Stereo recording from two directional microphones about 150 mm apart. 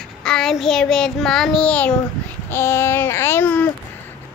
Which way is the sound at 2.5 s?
15° left (ahead or behind).